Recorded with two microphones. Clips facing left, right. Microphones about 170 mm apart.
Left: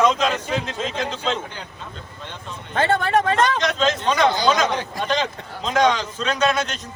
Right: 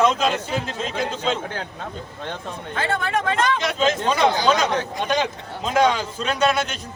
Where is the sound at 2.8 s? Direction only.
40° left (ahead or behind).